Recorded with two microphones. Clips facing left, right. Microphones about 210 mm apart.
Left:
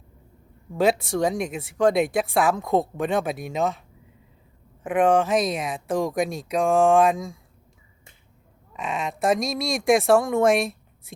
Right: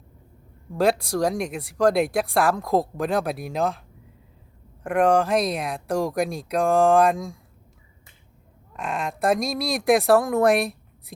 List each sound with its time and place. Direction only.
0.7 s speech: centre (ahead or behind)
8.7 s speech: centre (ahead or behind)